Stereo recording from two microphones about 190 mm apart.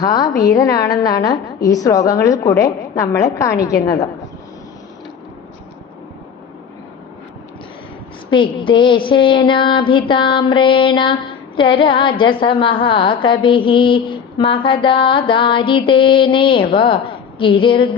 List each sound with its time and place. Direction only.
0.0 s a woman's voice: 20° left (ahead or behind)
8.3 s mantra: 25° left (ahead or behind)